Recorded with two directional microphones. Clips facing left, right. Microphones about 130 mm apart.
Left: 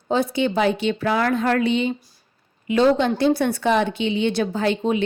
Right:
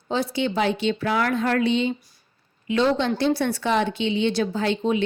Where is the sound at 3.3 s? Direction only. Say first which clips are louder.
Left 3 dB; 55° left (ahead or behind).